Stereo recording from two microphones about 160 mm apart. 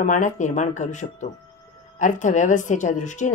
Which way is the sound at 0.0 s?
50° left (ahead or behind).